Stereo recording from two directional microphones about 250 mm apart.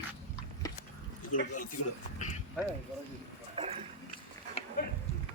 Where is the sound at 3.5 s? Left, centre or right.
Right.